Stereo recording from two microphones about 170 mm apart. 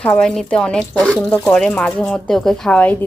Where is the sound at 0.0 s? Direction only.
5° left (ahead or behind).